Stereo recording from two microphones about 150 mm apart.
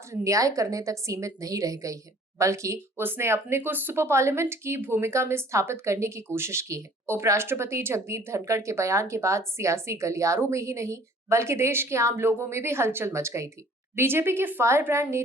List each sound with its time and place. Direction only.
0.1 s a woman's voice: 20° right (ahead or behind)